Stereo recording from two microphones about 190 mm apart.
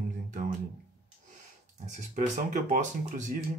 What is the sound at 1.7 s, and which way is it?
Speech, 40° right (ahead or behind).